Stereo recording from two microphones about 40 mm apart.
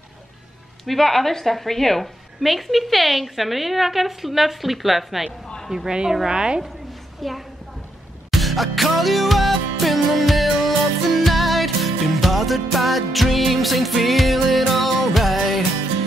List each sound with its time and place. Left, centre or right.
0.8 s a woman's voice: centre
5.9 s a woman's voice: centre
7.2 s a woman's voice: centre
8.3 s music: centre